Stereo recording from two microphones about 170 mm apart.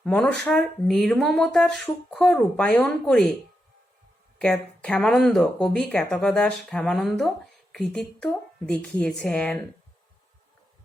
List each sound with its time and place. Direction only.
0.0 s speech: 5° left (ahead or behind)
4.4 s speech: 5° left (ahead or behind)